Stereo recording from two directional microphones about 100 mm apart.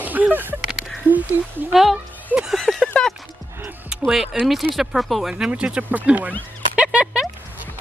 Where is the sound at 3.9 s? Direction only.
5° right (ahead or behind).